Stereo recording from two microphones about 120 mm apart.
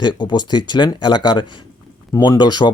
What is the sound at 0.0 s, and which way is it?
Speech, 40° left (ahead or behind).